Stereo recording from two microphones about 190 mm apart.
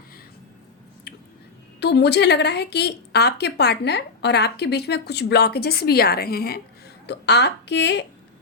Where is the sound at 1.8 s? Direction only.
65° left (ahead or behind).